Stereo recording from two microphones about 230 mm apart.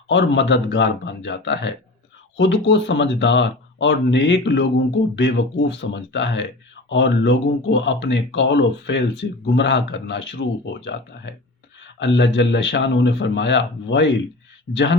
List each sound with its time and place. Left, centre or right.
0.1 s speech: left